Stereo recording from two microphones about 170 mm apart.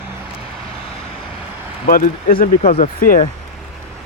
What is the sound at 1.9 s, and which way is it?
Speech, 55° left (ahead or behind).